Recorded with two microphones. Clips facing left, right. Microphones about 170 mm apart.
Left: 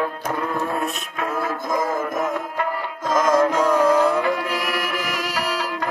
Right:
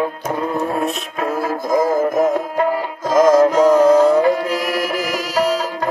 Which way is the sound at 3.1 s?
30° right (ahead or behind).